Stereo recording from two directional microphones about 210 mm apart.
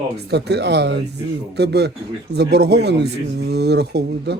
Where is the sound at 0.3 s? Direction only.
50° right (ahead or behind).